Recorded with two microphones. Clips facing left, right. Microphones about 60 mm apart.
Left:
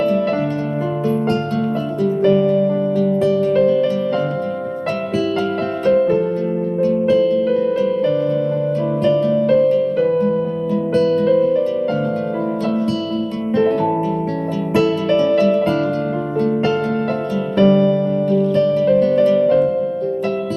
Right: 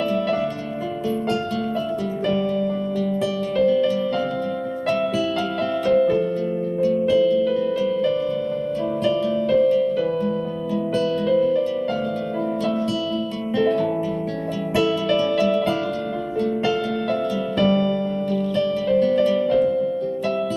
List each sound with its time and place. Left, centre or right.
2.2 s music: left
5.8 s music: left
6.8 s harp: left
10.9 s music: left
13.6 s harp: left
14.8 s music: left
17.6 s music: left
18.5 s harp: left